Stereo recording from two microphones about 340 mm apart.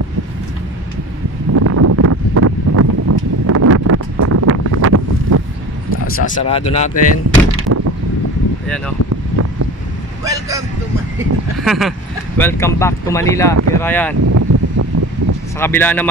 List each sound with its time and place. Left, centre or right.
1.5 s a sound: right
6.2 s speech: centre
8.6 s speech: centre
10.2 s vehicle: centre
11.1 s speech: centre
14.3 s a sound: right
15.6 s speech: centre